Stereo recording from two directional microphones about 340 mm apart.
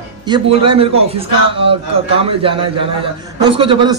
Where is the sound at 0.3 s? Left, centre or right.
Centre.